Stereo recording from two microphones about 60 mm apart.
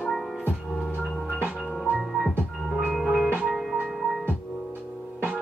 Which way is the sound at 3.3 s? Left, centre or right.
Right.